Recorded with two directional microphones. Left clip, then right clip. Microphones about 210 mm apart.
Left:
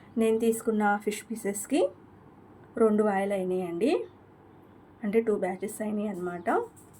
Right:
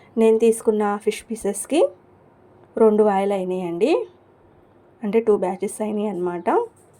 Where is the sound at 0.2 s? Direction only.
35° right (ahead or behind).